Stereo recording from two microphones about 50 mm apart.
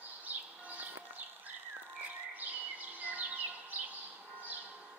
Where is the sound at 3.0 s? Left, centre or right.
Right.